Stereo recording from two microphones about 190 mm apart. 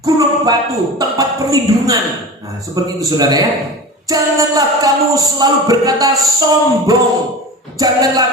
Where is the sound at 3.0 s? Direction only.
20° right (ahead or behind).